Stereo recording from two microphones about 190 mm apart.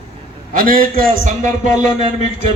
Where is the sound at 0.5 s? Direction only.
50° right (ahead or behind).